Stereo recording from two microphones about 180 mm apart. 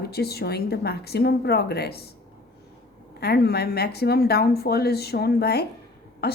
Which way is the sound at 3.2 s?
60° left (ahead or behind).